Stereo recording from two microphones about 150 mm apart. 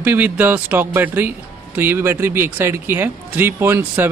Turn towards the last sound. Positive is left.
turn(degrees=-15)  # may be behind; listen again after turning